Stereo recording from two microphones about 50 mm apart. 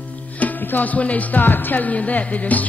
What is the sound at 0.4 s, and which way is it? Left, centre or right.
Music, left.